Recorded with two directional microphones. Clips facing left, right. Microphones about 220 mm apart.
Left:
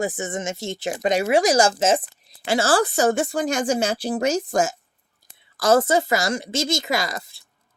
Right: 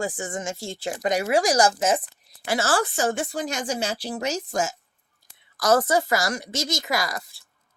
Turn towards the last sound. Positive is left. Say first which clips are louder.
# left 2 dB
turn(degrees=25)  # may be behind; listen again after turning